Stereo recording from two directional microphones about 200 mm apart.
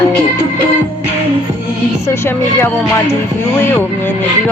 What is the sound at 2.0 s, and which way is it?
Speech, 10° left (ahead or behind).